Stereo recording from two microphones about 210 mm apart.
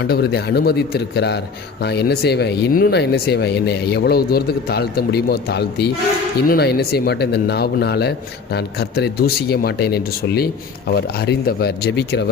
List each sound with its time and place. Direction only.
0.0 s speech: 50° left (ahead or behind)